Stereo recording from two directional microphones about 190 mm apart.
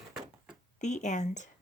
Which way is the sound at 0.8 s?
40° left (ahead or behind).